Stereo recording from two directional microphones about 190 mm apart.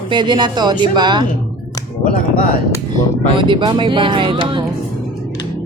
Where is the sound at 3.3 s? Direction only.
25° right (ahead or behind).